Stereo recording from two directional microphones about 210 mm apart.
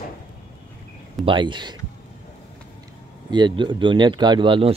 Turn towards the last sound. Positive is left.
turn(degrees=-25)  # may be behind; listen again after turning